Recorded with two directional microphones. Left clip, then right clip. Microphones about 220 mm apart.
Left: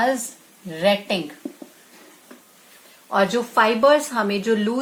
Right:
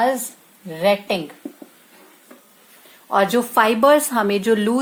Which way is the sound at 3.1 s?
45° right (ahead or behind).